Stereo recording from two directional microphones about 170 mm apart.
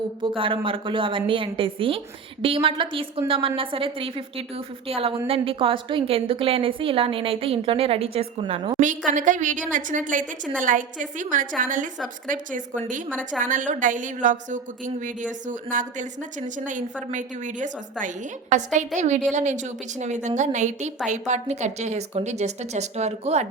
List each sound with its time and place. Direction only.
0.2 s a woman's voice: 30° right (ahead or behind)
8.8 s a woman's voice: 50° right (ahead or behind)